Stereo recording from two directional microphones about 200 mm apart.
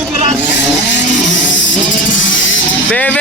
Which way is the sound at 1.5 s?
65° left (ahead or behind).